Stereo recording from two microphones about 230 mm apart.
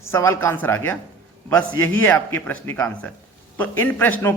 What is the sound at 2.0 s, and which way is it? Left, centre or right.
A man's voice, centre.